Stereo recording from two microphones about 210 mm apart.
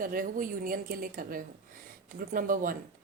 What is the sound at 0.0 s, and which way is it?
A woman's voice, 40° right (ahead or behind).